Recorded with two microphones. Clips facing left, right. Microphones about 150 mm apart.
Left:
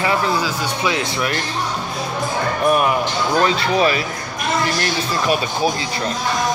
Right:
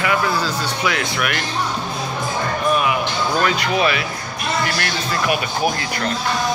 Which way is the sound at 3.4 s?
30° left (ahead or behind).